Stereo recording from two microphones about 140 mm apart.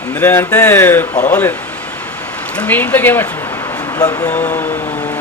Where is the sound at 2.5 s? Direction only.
10° left (ahead or behind).